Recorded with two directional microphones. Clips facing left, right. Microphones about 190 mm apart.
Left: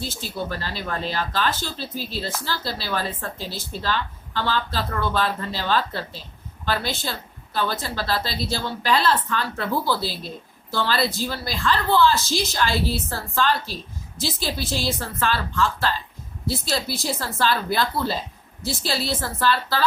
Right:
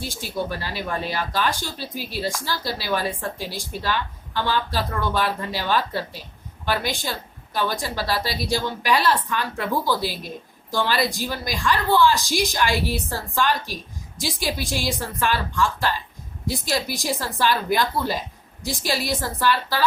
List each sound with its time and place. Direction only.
0.0 s a woman's voice: 15° right (ahead or behind)